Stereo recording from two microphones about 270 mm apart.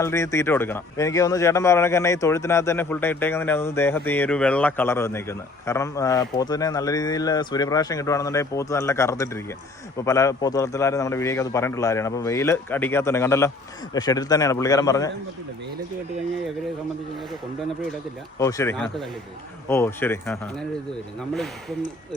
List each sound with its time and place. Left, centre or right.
0.0 s speech: centre
18.3 s speech: centre